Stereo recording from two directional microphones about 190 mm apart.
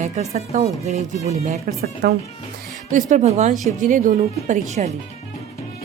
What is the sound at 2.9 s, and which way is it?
Speech, 40° right (ahead or behind).